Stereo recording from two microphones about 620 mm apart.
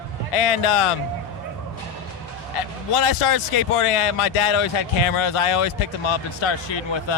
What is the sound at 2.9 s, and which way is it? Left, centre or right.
Speech, left.